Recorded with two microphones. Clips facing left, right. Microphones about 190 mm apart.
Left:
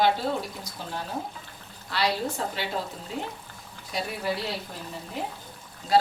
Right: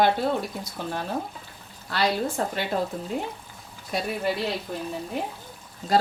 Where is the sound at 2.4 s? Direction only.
50° right (ahead or behind).